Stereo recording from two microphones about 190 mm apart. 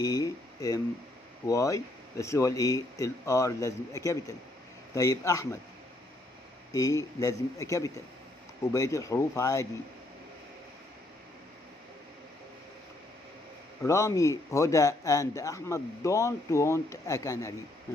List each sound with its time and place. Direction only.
0.0 s a man's voice: 20° left (ahead or behind)
6.7 s a man's voice: 15° left (ahead or behind)
13.8 s a man's voice: 15° left (ahead or behind)